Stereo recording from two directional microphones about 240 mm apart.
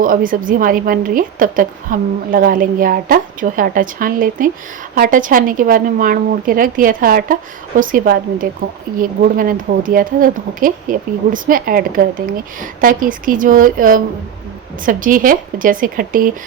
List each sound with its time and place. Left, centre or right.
0.0 s a woman's voice: right